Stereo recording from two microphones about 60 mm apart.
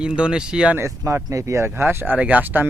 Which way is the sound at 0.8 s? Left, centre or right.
Right.